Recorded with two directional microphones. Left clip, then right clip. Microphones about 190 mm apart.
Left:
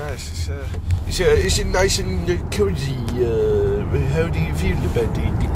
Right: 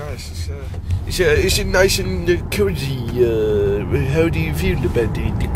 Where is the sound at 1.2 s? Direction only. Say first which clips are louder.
Right 1 dB; 40° right (ahead or behind).